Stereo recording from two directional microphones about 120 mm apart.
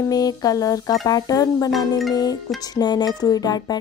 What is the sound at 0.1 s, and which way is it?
Speech, 30° left (ahead or behind).